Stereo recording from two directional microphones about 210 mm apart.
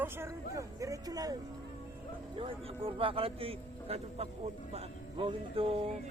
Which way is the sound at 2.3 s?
25° right (ahead or behind).